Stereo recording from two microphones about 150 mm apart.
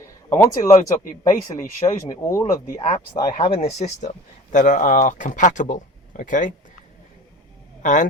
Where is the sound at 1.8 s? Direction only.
35° left (ahead or behind).